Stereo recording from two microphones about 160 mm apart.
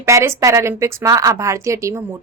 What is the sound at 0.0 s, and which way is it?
A woman's voice, 15° right (ahead or behind).